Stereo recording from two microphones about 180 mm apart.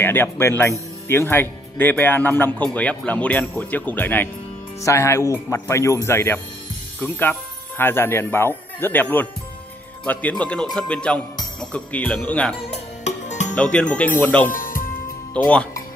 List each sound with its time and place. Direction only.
0.0 s speech: 10° left (ahead or behind)
12.7 s music: 40° left (ahead or behind)
13.6 s speech: 5° left (ahead or behind)
14.5 s music: 50° left (ahead or behind)
15.3 s speech: 5° left (ahead or behind)